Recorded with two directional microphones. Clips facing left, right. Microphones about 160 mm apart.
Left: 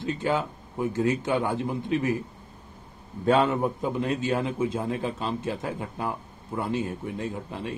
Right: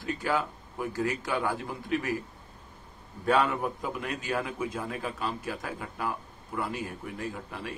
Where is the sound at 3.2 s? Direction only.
25° left (ahead or behind).